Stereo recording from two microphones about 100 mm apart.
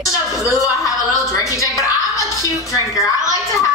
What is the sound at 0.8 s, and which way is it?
Music, 35° left (ahead or behind).